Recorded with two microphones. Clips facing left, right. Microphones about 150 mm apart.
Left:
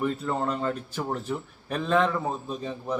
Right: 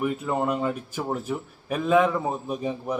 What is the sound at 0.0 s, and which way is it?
A man's voice, 10° right (ahead or behind).